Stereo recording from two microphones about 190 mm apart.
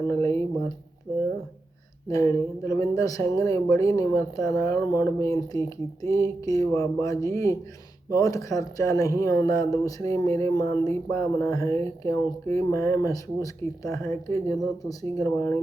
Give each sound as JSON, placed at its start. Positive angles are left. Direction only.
{"t": 0.1, "sound": "speech", "side_deg": 15}
{"t": 2.0, "sound": "speech", "side_deg": 15}